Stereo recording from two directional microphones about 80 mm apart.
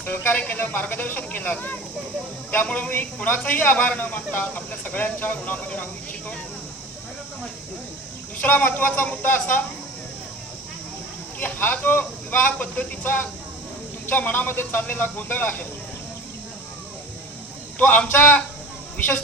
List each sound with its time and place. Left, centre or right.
0.0 s speech: left
8.4 s speech: centre
11.3 s speech: left
17.7 s a man's voice: centre